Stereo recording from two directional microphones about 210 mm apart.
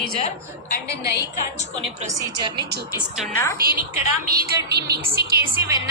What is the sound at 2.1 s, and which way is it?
Speech, 20° right (ahead or behind).